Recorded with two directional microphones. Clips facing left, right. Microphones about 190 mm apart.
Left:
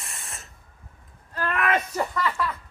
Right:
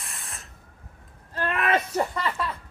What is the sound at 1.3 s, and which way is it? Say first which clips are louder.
Wail: even; 25° right (ahead or behind).